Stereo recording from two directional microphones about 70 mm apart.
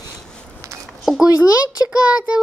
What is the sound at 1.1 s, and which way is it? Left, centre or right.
Speech, centre.